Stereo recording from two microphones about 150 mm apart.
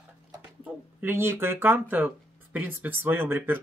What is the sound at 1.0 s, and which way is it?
Speech, 15° right (ahead or behind).